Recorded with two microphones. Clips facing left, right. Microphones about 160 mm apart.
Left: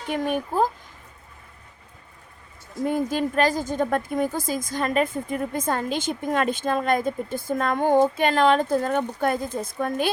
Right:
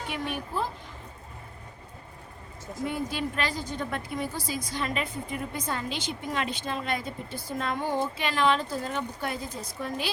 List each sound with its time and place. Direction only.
0.1 s a woman's voice: 45° left (ahead or behind)
2.8 s a woman's voice: 45° left (ahead or behind)